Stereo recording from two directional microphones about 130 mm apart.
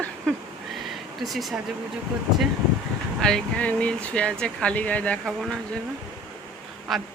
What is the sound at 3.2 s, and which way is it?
Speech, 5° left (ahead or behind).